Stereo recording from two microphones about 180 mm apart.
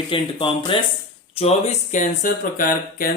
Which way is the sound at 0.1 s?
30° left (ahead or behind).